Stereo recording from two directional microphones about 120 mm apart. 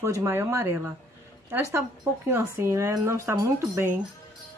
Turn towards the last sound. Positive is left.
turn(degrees=-25)  # may be behind; listen again after turning